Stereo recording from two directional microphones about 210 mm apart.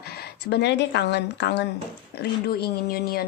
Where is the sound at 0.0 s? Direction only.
50° left (ahead or behind).